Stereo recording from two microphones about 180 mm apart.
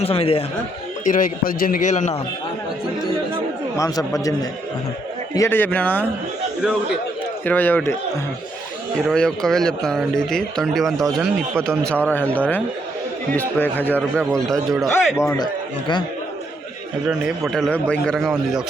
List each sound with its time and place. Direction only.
0.0 s speech: 30° left (ahead or behind)
1.0 s a man's voice: 50° left (ahead or behind)
3.8 s a man's voice: 20° left (ahead or behind)
7.4 s speech: 10° left (ahead or behind)
9.0 s speech: 5° left (ahead or behind)
13.6 s speech: 10° left (ahead or behind)
15.2 s speech: 15° left (ahead or behind)
17.1 s speech: centre (ahead or behind)